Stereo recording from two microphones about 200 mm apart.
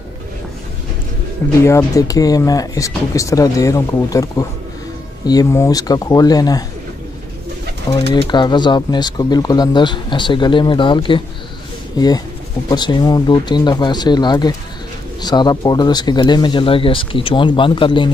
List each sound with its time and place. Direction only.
1.6 s speech: 15° left (ahead or behind)
8.1 s speech: 20° left (ahead or behind)